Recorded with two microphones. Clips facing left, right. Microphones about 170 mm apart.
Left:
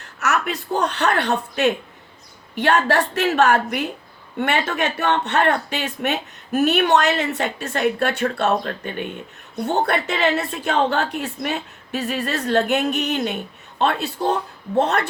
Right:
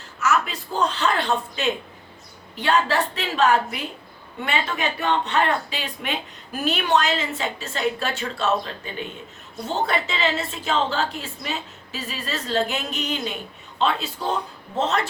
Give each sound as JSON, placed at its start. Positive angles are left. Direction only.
{"t": 0.0, "sound": "a woman's voice", "side_deg": 65}
{"t": 5.4, "sound": "speech", "side_deg": 50}
{"t": 6.5, "sound": "a woman's voice", "side_deg": 65}